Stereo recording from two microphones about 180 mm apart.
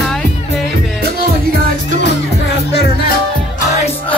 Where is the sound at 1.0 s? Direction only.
55° right (ahead or behind).